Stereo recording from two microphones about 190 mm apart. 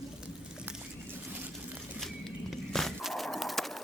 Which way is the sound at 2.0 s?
Centre (ahead or behind).